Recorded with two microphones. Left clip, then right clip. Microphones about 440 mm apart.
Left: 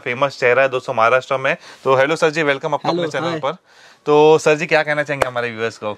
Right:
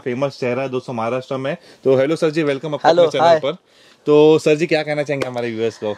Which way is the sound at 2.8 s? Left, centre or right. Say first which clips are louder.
Right 8 dB; right.